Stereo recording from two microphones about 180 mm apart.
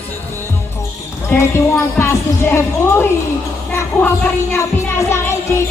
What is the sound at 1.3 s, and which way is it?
Speech, 15° left (ahead or behind).